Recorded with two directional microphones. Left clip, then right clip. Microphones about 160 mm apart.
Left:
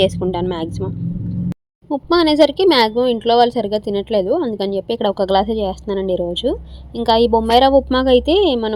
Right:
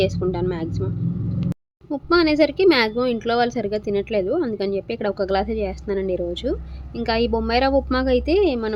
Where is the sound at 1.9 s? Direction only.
35° left (ahead or behind).